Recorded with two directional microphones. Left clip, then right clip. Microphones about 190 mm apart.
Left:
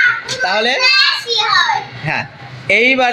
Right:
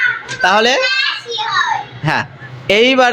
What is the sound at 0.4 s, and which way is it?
Speech, 40° right (ahead or behind).